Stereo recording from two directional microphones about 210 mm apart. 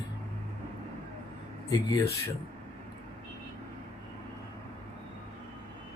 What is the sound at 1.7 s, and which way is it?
Speech, 15° left (ahead or behind).